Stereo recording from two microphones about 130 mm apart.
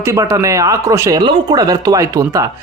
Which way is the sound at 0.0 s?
25° right (ahead or behind).